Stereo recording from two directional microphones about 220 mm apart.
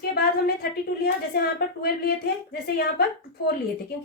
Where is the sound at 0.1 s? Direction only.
45° left (ahead or behind).